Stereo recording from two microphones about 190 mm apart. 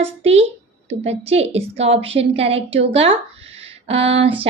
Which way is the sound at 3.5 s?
30° right (ahead or behind).